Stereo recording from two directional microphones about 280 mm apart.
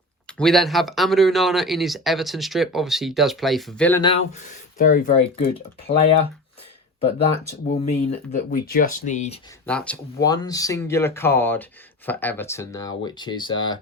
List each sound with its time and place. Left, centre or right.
0.3 s speech: centre
4.0 s speech: left
7.7 s speech: left
9.6 s speech: centre